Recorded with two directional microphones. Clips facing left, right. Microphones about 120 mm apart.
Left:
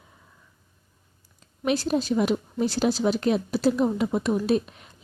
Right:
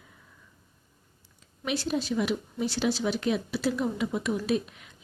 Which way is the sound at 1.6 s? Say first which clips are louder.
Left 5 dB; 40° left (ahead or behind).